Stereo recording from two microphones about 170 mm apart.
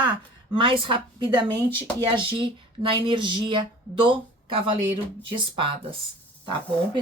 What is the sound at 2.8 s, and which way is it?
Speech, 30° right (ahead or behind).